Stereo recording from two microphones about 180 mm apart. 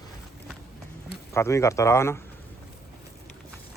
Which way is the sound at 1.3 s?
15° left (ahead or behind).